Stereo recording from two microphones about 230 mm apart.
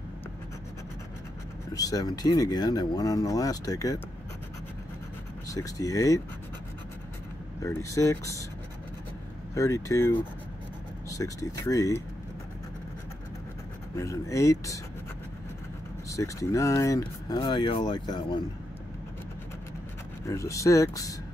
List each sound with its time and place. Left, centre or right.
1.7 s speech: centre
5.5 s speech: centre
7.6 s speech: centre
9.6 s speech: centre
13.9 s speech: centre
16.1 s speech: centre
20.2 s speech: centre